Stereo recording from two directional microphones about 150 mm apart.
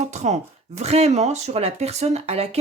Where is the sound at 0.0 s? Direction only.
50° right (ahead or behind).